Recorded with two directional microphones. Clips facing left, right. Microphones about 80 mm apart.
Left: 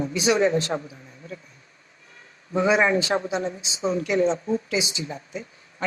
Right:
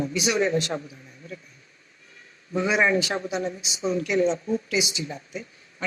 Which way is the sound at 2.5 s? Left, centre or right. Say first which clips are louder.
Left 2 dB; left.